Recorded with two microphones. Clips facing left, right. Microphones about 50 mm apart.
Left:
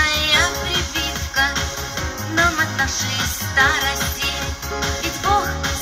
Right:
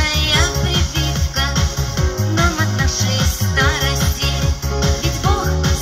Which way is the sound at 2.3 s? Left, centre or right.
Left.